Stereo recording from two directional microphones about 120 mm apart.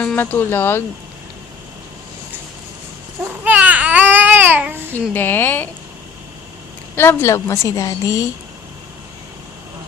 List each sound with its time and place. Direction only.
0.0 s speech: 15° left (ahead or behind)
3.2 s babbling: 15° right (ahead or behind)
5.1 s speech: 15° left (ahead or behind)
6.9 s a woman's voice: 20° left (ahead or behind)